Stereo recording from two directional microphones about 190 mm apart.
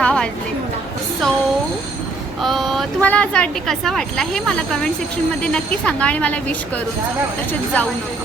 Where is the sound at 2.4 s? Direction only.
Centre (ahead or behind).